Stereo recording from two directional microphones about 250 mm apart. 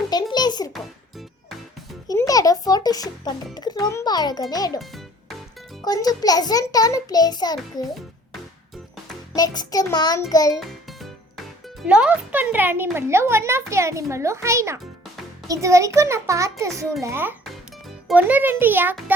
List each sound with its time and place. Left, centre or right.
0.1 s a sound: centre
2.0 s a child's voice: centre
4.8 s a child's voice: centre
5.8 s a child's voice: centre
9.3 s a child's voice: centre
10.5 s music: centre
11.8 s a child's voice: centre